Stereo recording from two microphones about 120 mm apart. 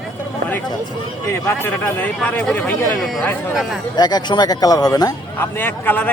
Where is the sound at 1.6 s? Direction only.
15° left (ahead or behind).